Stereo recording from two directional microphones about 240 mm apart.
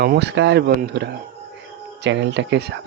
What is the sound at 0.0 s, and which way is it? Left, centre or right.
Speech, right.